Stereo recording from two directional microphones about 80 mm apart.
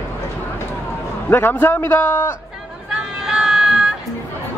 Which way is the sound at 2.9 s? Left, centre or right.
Centre.